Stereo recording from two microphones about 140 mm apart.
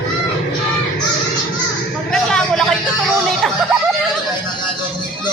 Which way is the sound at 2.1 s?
5° left (ahead or behind).